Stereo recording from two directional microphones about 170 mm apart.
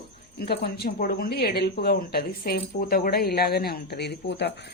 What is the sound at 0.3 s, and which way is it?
Speech, 70° left (ahead or behind).